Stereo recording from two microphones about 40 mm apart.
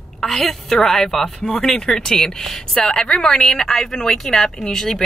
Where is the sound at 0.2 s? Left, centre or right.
Centre.